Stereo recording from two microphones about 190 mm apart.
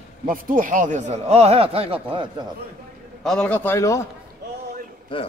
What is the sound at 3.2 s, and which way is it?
Speech, 5° left (ahead or behind).